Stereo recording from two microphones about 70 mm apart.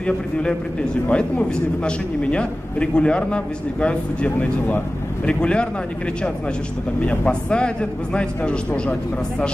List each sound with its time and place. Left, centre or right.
0.0 s a man's voice: centre
7.0 s a man's voice: centre